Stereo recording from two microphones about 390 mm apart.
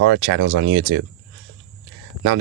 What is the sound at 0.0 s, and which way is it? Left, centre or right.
Speech, right.